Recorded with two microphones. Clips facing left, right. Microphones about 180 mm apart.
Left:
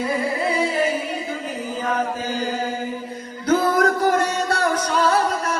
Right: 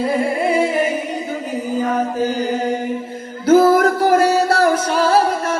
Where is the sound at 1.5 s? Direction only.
15° right (ahead or behind).